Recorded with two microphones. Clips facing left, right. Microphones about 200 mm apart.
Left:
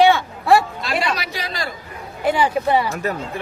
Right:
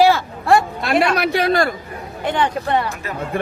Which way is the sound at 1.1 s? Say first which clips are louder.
Right 11 dB; 60° right (ahead or behind).